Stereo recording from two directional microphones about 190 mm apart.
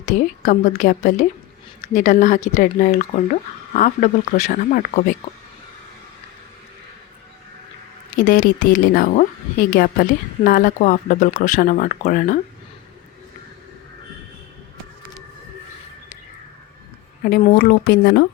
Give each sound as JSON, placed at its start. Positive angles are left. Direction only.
{"t": 0.0, "sound": "speech", "side_deg": 40}
{"t": 8.1, "sound": "a woman's voice", "side_deg": 45}
{"t": 17.2, "sound": "a woman's voice", "side_deg": 50}